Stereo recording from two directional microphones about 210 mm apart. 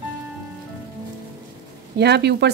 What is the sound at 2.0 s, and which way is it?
Speech, 55° right (ahead or behind).